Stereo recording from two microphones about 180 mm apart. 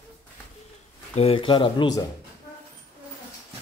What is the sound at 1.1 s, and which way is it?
Speech, 30° left (ahead or behind).